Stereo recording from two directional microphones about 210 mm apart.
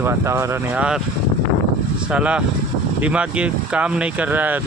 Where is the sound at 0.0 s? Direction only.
15° right (ahead or behind).